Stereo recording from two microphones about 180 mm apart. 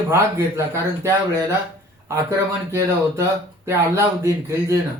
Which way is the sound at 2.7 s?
15° right (ahead or behind).